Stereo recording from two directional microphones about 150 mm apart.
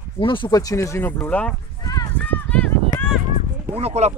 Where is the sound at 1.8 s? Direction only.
25° left (ahead or behind).